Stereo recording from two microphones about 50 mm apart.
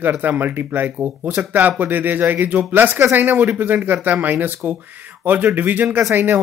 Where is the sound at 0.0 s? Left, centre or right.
Right.